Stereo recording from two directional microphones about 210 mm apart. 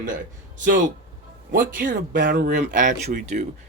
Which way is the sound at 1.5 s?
40° right (ahead or behind).